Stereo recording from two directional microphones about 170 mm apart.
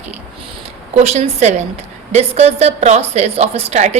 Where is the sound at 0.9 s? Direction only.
40° right (ahead or behind).